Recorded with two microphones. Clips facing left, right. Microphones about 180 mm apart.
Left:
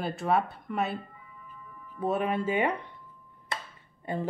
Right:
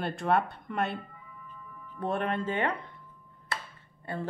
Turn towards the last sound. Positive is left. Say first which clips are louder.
# left 3 dB
turn(degrees=15)  # may be behind; listen again after turning